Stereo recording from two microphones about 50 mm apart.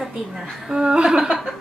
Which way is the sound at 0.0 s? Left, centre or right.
Centre.